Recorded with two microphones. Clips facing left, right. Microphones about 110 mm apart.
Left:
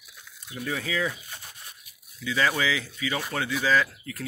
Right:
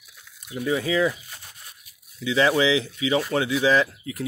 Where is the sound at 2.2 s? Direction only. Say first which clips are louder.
Right 6 dB; 20° right (ahead or behind).